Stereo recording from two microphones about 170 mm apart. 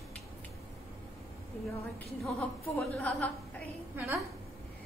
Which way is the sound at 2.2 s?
5° left (ahead or behind).